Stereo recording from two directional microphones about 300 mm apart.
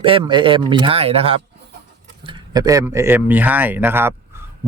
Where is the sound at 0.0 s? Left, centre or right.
Centre.